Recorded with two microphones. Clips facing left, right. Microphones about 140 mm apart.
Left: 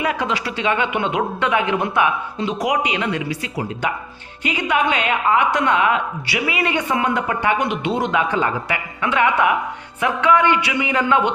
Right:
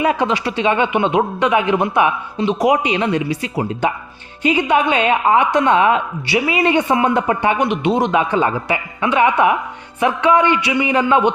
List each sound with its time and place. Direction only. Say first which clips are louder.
0.0 s a woman's voice: right 5 dB; 25° right (ahead or behind)